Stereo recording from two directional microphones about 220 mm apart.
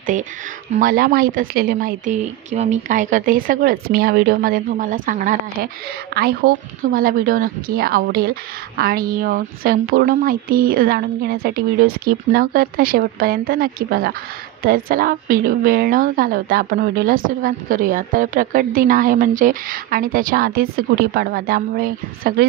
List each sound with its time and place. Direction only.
0.7 s speech: 40° right (ahead or behind)